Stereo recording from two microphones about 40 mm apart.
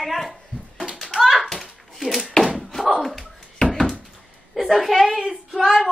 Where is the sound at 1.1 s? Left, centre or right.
Centre.